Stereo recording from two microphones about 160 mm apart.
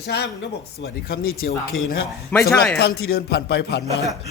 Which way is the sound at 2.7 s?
80° left.